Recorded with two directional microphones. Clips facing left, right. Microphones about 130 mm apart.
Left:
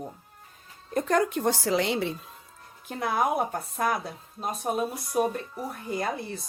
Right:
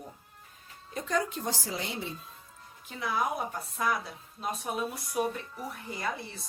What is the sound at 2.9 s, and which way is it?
Speech, 55° left (ahead or behind).